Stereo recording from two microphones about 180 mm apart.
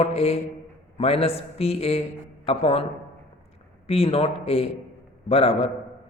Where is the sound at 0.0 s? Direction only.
35° left (ahead or behind).